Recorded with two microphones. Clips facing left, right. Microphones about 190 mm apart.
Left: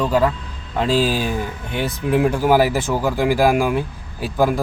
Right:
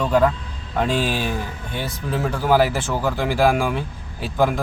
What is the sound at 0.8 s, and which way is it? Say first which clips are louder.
Speech: left 5 dB; 30° left (ahead or behind).